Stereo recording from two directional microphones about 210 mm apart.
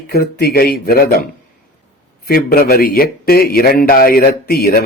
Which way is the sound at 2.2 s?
45° left (ahead or behind).